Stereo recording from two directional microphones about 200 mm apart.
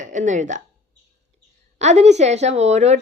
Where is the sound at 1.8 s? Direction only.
35° right (ahead or behind).